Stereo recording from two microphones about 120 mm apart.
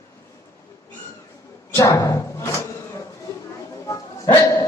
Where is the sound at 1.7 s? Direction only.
25° left (ahead or behind).